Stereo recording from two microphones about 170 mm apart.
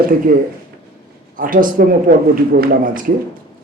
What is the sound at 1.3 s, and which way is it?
A man's voice, 55° right (ahead or behind).